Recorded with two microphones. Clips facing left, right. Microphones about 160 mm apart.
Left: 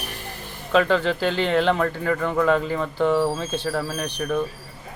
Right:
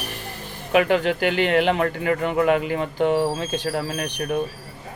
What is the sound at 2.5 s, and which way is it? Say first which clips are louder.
Speech: right 1 dB; 15° right (ahead or behind).